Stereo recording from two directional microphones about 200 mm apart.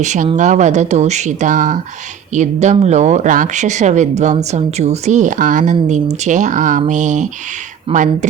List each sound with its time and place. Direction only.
0.0 s speech: 35° right (ahead or behind)